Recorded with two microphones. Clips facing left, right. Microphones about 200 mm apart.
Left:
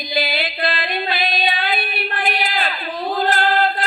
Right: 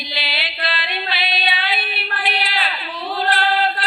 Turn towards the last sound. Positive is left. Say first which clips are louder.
# left 2 dB
turn(degrees=45)  # may be behind; listen again after turning